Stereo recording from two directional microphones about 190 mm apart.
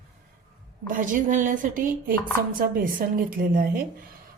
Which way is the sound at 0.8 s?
45° right (ahead or behind).